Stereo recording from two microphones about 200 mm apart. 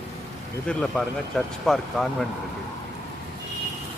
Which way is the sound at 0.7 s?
5° left (ahead or behind).